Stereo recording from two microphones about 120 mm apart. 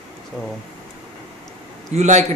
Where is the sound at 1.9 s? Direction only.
75° right (ahead or behind).